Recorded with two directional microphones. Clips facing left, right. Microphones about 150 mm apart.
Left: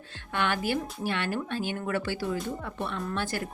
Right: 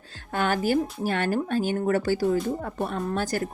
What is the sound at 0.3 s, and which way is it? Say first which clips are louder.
A woman's voice: right 5 dB; 40° right (ahead or behind).